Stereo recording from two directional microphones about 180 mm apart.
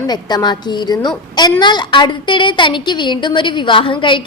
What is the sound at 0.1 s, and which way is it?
A woman's voice, 25° left (ahead or behind).